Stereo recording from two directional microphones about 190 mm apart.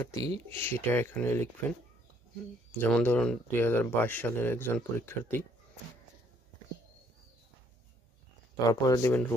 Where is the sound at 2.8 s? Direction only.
10° left (ahead or behind).